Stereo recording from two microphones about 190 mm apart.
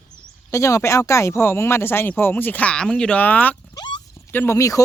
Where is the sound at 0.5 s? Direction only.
15° left (ahead or behind).